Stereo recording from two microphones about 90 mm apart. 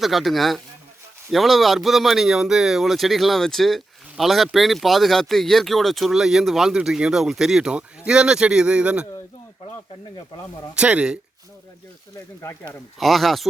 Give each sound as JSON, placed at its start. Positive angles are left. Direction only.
{"t": 0.0, "sound": "speech", "side_deg": 0}
{"t": 10.8, "sound": "speech", "side_deg": -10}
{"t": 12.4, "sound": "speech", "side_deg": 35}
{"t": 13.0, "sound": "speech", "side_deg": 0}